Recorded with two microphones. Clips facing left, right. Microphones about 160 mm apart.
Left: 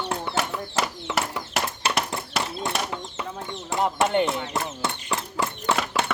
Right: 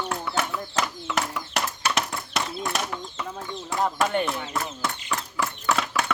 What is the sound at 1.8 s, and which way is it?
Horse, 30° left (ahead or behind).